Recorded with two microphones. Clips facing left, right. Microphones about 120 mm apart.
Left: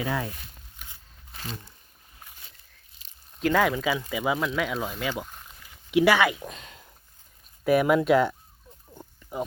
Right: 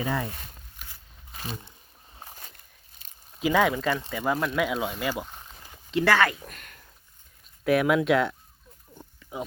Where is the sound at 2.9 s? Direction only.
50° right (ahead or behind).